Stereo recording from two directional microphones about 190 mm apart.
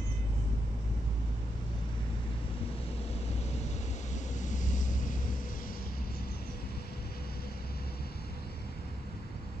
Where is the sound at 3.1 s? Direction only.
35° left (ahead or behind).